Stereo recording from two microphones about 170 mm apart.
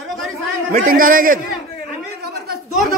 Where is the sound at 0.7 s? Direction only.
55° right (ahead or behind).